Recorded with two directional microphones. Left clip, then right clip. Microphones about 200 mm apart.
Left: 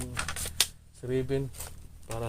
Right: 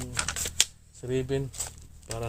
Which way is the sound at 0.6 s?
50° right (ahead or behind).